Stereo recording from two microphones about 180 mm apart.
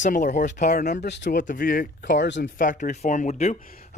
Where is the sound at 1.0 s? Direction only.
70° left (ahead or behind).